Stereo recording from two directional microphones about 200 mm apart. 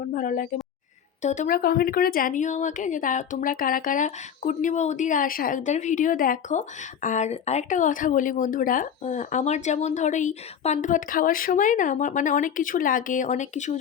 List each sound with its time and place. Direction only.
0.1 s a woman's voice: 40° left (ahead or behind)